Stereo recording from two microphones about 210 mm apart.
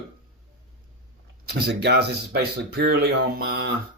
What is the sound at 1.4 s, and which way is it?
Speech, 50° right (ahead or behind).